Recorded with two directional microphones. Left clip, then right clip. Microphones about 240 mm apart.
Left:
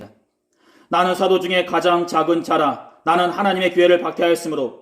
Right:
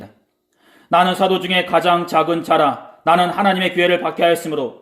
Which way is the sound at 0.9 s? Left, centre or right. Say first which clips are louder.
Right 2 dB; centre.